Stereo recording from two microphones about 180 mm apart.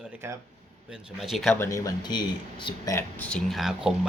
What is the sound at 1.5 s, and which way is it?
Speech, 15° left (ahead or behind).